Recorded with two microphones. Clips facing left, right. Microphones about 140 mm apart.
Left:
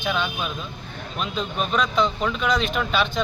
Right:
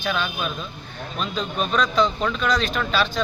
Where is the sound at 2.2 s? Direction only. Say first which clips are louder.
Even; 5° left (ahead or behind).